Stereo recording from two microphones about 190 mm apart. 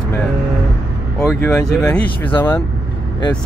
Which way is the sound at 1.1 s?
15° left (ahead or behind).